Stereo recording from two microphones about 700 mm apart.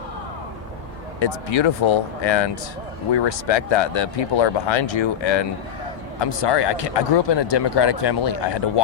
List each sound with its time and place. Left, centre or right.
1.2 s speech: left